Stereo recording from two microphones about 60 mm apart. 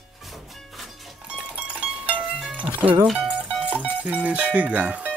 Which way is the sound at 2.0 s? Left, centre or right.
Right.